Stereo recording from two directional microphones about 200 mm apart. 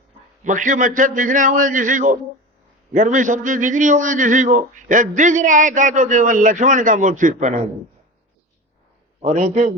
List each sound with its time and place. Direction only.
0.4 s a man's voice: 40° right (ahead or behind)
9.2 s a man's voice: 35° right (ahead or behind)